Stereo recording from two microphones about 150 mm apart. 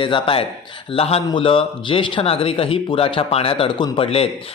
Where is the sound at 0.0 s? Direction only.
35° left (ahead or behind).